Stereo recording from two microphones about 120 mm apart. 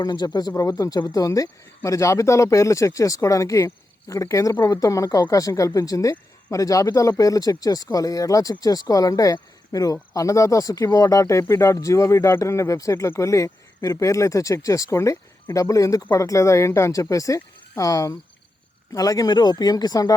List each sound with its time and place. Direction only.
0.0 s speech: 35° left (ahead or behind)